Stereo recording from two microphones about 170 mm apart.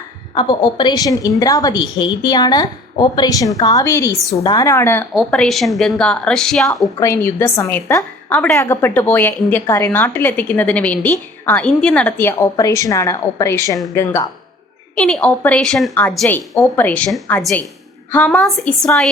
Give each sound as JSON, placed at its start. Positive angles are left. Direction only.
{"t": 0.6, "sound": "a woman's voice", "side_deg": 25}
{"t": 5.1, "sound": "a woman's voice", "side_deg": 5}
{"t": 7.0, "sound": "a woman's voice", "side_deg": 15}